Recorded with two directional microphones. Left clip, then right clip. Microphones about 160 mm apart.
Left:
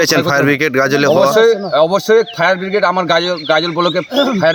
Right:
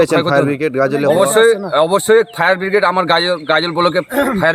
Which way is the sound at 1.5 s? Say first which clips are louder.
Left 2 dB; 10° right (ahead or behind).